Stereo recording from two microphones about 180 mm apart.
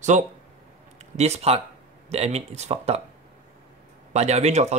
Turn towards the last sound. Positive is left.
turn(degrees=-40)  # may be behind; listen again after turning